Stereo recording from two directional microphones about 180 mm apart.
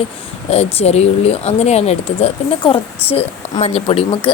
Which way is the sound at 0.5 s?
35° left (ahead or behind).